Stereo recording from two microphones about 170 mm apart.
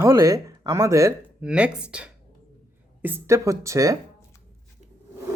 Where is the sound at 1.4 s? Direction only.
5° right (ahead or behind).